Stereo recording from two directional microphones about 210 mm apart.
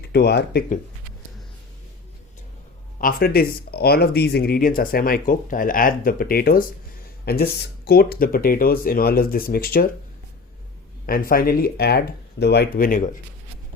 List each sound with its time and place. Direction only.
0.1 s speech: 50° left (ahead or behind)
3.0 s speech: 45° left (ahead or behind)
11.0 s speech: 45° left (ahead or behind)